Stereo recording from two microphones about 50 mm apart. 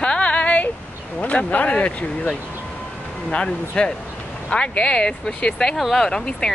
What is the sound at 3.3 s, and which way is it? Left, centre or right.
Speech, left.